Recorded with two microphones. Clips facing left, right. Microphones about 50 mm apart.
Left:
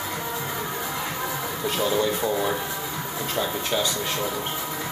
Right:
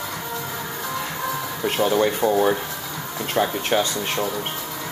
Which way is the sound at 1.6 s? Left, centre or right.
Right.